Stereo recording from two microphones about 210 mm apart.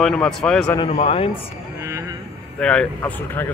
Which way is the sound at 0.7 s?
30° left (ahead or behind).